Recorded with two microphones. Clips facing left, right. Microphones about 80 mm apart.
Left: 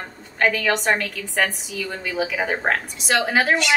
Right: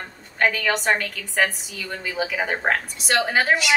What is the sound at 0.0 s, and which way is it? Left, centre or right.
A woman's voice, centre.